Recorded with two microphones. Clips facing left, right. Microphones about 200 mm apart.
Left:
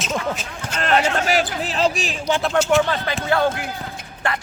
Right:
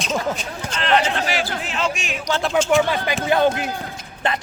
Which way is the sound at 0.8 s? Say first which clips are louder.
Even; 45° left (ahead or behind).